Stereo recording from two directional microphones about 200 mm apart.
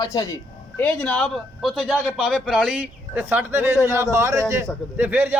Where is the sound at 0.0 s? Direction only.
15° left (ahead or behind).